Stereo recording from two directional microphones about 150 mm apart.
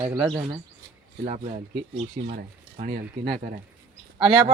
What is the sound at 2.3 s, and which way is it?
Speech, 70° right (ahead or behind).